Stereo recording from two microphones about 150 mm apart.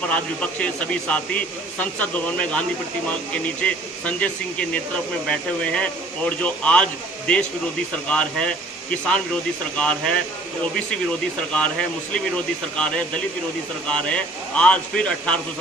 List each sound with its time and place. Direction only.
0.1 s a man's voice: 10° left (ahead or behind)
3.6 s a man's voice: 10° left (ahead or behind)
11.5 s a man's voice: 5° left (ahead or behind)